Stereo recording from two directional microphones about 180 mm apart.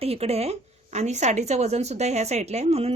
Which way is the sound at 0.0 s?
35° right (ahead or behind).